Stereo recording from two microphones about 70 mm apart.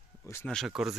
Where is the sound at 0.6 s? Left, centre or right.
Centre.